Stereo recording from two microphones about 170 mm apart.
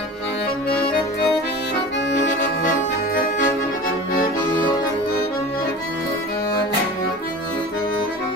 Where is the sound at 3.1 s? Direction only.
55° left (ahead or behind).